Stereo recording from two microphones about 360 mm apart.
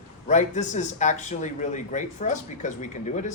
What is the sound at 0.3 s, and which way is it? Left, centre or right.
A man's voice, centre.